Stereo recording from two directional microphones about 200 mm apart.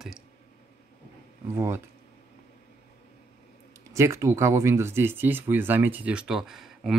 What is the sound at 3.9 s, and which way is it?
Speech, 15° right (ahead or behind).